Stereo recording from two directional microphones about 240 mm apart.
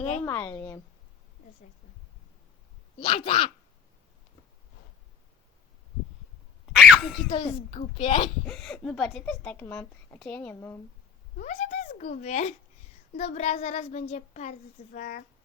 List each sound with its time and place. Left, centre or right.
0.3 s speech: centre
3.0 s a child's voice: left
6.7 s a sound: centre
7.3 s a child's voice: left
8.4 s a woman's voice: centre
11.3 s a child's voice: left